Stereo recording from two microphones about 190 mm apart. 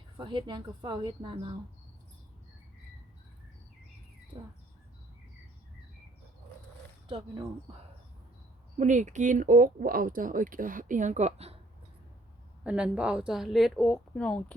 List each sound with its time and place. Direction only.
0.2 s speech: 25° right (ahead or behind)
4.3 s bird: 15° right (ahead or behind)
7.1 s speech: 25° right (ahead or behind)
8.8 s speech: 40° right (ahead or behind)
12.6 s a woman's voice: 5° right (ahead or behind)